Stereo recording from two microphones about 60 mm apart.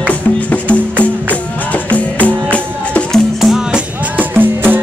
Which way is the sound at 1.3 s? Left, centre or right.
Left.